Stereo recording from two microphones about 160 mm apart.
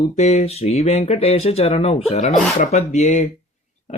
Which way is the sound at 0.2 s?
45° left (ahead or behind).